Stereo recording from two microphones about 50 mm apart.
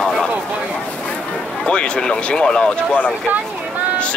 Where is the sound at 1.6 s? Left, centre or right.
Left.